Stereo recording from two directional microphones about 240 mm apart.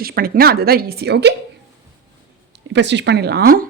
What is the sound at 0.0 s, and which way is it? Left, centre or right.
A woman's voice, right.